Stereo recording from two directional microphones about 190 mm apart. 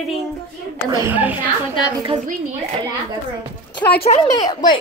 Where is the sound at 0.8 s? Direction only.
20° right (ahead or behind).